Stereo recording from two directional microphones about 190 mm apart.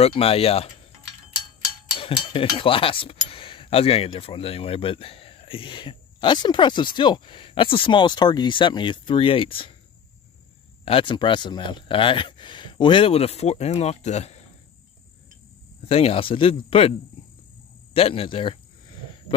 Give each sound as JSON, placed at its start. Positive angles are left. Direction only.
{"t": 0.0, "sound": "speech", "side_deg": 30}
{"t": 2.0, "sound": "speech", "side_deg": 25}
{"t": 10.9, "sound": "speech", "side_deg": 25}
{"t": 15.9, "sound": "speech", "side_deg": 30}
{"t": 17.9, "sound": "speech", "side_deg": 30}